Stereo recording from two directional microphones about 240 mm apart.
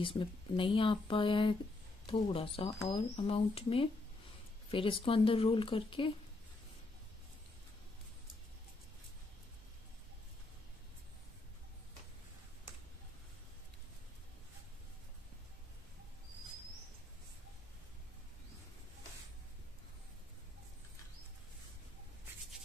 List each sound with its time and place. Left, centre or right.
0.0 s speech: left